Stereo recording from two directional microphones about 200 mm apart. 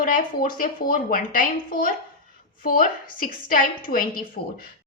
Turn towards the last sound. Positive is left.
turn(degrees=45)  # may be behind; listen again after turning